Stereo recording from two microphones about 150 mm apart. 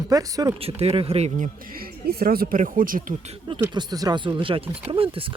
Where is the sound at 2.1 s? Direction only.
90° right; by 3.2 s 65° right (ahead or behind).